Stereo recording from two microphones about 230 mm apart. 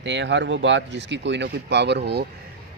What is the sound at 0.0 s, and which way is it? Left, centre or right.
Speech, right.